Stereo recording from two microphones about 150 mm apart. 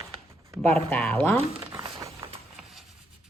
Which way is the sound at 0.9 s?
10° left (ahead or behind).